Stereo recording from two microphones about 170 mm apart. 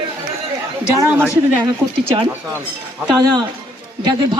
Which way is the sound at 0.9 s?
15° right (ahead or behind).